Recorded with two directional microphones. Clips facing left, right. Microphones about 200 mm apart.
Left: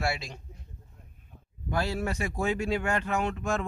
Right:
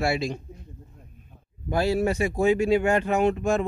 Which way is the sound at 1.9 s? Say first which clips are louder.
Right 8 dB; 5° right (ahead or behind).